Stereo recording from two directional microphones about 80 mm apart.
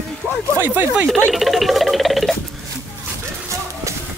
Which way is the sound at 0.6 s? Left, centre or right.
Right.